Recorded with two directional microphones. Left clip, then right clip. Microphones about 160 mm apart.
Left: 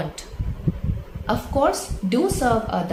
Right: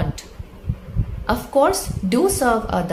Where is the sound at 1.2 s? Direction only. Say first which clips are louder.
Right 3 dB; 30° right (ahead or behind).